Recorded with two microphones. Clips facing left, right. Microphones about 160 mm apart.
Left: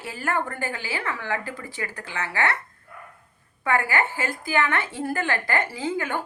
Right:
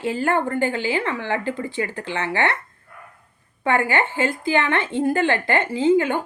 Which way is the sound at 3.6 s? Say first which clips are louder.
Right 3 dB; 25° right (ahead or behind).